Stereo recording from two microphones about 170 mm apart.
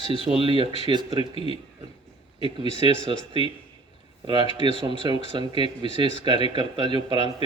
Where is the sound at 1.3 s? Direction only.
35° left (ahead or behind).